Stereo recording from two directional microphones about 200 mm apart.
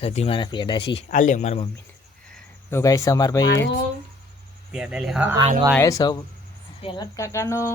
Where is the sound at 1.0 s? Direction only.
40° left (ahead or behind).